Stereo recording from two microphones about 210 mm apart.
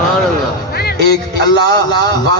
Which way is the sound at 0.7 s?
50° left (ahead or behind).